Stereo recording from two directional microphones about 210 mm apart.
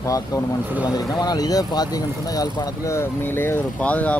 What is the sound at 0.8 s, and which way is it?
Speech, 20° left (ahead or behind).